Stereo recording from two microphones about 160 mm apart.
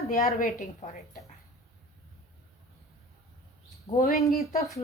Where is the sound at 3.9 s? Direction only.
50° left (ahead or behind).